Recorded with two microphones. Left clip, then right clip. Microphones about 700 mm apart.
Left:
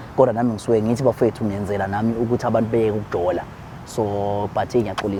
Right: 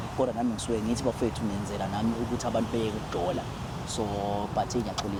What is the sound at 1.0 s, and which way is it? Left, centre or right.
Speech, left.